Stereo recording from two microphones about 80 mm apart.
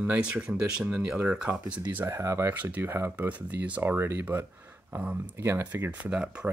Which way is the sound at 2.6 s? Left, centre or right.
Right.